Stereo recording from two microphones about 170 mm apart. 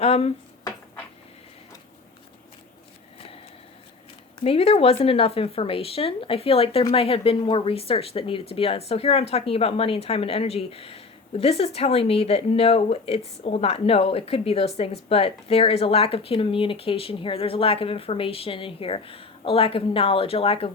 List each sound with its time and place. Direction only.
0.0 s speech: 35° left (ahead or behind)
4.4 s speech: 35° left (ahead or behind)